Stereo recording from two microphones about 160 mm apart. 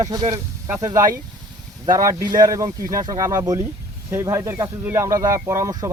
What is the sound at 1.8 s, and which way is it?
Speech, 20° right (ahead or behind).